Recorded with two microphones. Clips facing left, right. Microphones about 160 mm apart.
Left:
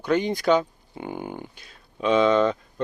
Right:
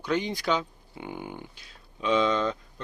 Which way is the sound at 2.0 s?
55° left (ahead or behind).